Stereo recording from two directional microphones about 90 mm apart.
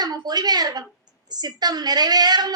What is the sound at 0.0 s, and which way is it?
A woman's voice, 50° right (ahead or behind).